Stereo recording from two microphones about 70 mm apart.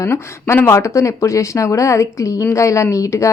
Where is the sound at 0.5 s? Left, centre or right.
Left.